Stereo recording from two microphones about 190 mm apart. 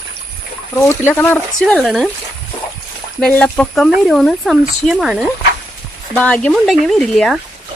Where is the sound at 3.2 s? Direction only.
5° left (ahead or behind).